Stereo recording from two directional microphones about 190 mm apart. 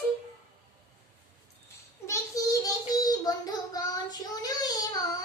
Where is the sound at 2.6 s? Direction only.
20° left (ahead or behind).